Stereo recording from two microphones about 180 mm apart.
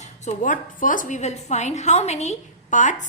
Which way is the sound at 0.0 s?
45° left (ahead or behind).